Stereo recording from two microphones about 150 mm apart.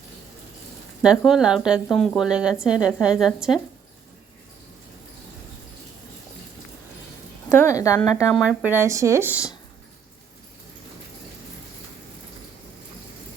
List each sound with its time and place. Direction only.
1.0 s a woman's voice: 5° right (ahead or behind)
7.5 s a woman's voice: 20° left (ahead or behind)
8.3 s speech: 5° right (ahead or behind)